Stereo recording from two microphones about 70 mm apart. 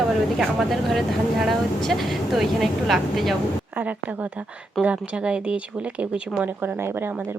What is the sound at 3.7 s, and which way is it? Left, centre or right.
A woman's voice, right.